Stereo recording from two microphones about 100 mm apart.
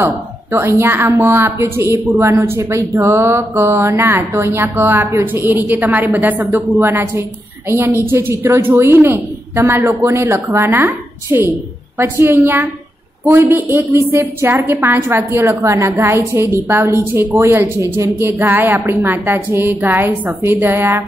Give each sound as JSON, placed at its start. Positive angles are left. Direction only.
{"t": 0.0, "sound": "a woman's voice", "side_deg": -25}